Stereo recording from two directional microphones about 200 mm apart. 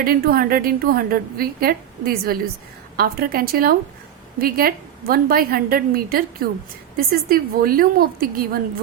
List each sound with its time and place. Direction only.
0.0 s a woman's voice: 50° right (ahead or behind)